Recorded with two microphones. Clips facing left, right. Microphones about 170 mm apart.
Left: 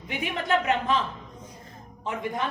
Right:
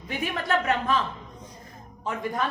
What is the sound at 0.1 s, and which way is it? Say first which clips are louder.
Speech: even; 20° left (ahead or behind).